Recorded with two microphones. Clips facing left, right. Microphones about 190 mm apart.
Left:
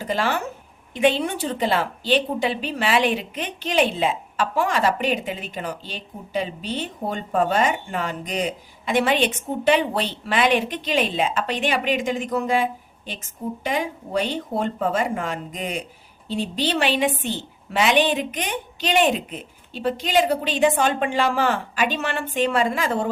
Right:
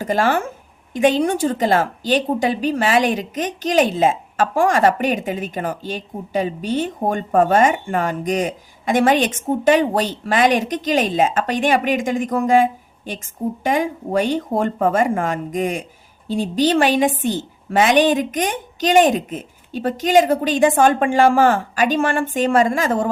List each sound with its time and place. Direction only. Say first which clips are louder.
0.0 s a woman's voice: right 5 dB; 50° right (ahead or behind)
13.7 s a woman's voice: right 6 dB; 45° right (ahead or behind)